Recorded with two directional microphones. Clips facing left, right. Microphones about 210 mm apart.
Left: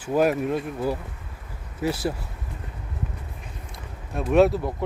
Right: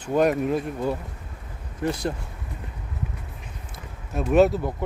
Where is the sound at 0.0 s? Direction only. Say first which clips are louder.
Even; 5° left (ahead or behind).